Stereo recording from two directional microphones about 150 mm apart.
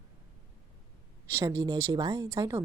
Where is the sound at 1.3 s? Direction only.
20° right (ahead or behind).